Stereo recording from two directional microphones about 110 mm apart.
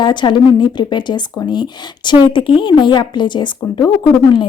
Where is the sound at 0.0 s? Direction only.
45° left (ahead or behind).